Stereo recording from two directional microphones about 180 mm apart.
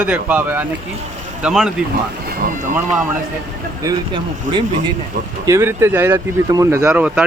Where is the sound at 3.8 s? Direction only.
25° right (ahead or behind).